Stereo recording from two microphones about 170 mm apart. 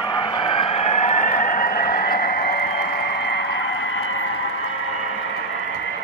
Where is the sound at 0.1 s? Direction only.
30° left (ahead or behind); by 3.4 s 80° left.